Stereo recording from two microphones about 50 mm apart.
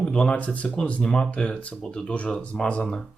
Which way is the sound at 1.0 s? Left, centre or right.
Centre.